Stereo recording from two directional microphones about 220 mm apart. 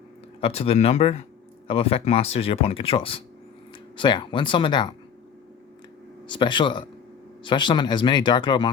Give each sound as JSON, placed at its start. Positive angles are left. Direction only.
{"t": 0.4, "sound": "speech", "side_deg": 25}
{"t": 6.2, "sound": "speech", "side_deg": 20}